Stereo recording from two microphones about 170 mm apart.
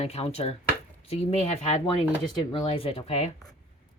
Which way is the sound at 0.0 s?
35° left (ahead or behind).